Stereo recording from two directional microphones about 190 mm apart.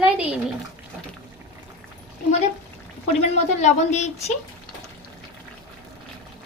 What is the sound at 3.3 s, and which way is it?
Speech, 40° left (ahead or behind).